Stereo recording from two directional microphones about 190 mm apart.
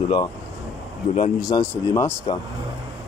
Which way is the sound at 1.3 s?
20° left (ahead or behind).